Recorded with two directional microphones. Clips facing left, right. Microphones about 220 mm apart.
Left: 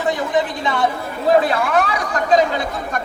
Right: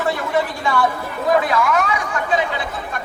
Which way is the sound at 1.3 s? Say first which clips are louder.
Left 2 dB; 30° left (ahead or behind).